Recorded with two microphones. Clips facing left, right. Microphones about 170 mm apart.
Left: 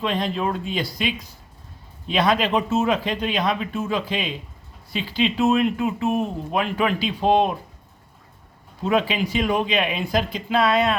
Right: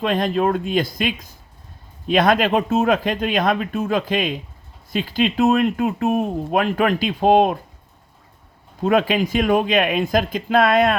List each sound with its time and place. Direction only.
0.0 s speech: 50° right (ahead or behind)
8.8 s speech: 50° right (ahead or behind)